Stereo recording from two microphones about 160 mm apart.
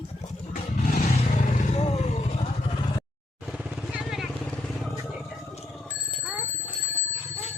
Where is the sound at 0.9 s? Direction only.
50° left (ahead or behind).